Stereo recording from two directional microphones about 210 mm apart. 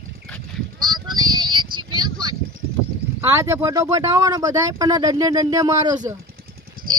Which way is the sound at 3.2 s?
15° right (ahead or behind).